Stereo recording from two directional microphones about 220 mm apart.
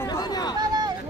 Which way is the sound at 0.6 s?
20° right (ahead or behind).